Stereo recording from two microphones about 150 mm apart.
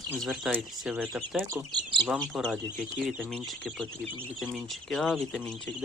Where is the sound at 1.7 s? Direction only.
30° right (ahead or behind).